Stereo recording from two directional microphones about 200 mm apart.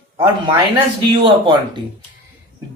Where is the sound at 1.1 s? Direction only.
25° right (ahead or behind).